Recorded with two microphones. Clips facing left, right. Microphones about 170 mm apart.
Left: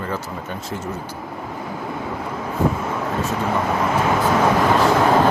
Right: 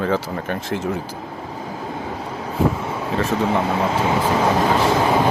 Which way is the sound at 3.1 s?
90° right.